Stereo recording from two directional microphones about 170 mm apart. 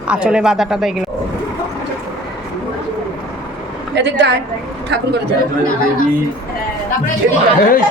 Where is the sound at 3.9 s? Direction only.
90° right.